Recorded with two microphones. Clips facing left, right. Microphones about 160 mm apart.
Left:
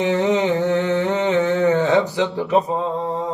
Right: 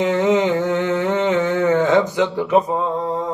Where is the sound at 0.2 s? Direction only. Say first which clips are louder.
Right 2 dB; 20° left (ahead or behind).